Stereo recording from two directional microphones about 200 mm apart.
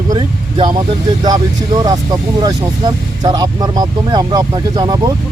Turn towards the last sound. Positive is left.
turn(degrees=-20)  # may be behind; listen again after turning